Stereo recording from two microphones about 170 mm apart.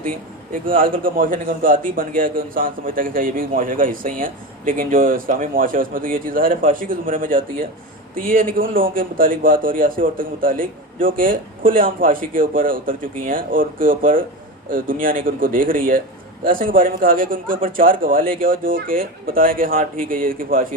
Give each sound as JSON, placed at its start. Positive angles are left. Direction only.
{"t": 0.6, "sound": "a man's voice", "side_deg": -55}